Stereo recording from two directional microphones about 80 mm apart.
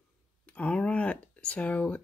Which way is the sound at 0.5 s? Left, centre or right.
Centre.